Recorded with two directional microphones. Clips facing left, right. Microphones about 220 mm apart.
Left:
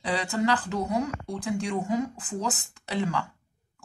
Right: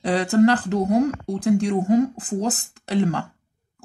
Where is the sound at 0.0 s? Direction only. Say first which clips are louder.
Right 10 dB; 50° right (ahead or behind).